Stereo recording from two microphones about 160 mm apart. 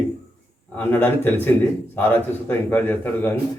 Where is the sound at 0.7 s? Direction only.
10° left (ahead or behind).